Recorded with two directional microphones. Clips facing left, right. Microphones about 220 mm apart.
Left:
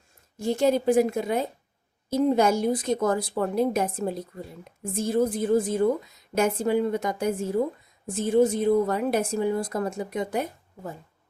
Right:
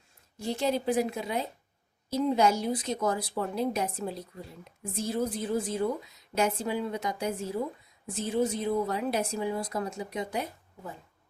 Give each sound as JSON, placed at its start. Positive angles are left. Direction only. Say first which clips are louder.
{"t": 0.3, "sound": "a woman's voice", "louder": "left 7 dB", "side_deg": 45}